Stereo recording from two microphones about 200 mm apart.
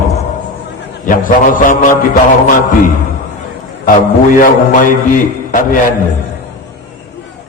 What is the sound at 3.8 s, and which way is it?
A man's voice, 45° left (ahead or behind).